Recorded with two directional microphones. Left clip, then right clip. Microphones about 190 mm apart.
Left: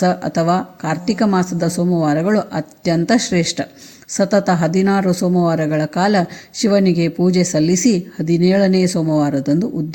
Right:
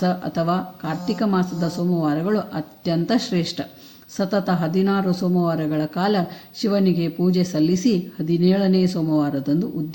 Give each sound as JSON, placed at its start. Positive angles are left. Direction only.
{"t": 0.0, "sound": "speech", "side_deg": 40}